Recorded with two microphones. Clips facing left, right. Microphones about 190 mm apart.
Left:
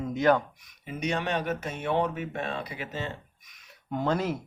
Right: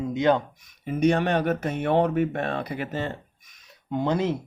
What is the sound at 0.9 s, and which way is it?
Speech, 50° right (ahead or behind).